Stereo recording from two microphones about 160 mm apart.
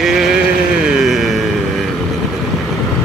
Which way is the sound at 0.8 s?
Centre (ahead or behind).